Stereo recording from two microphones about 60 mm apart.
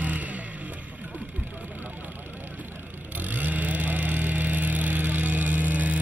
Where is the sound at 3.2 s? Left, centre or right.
Right.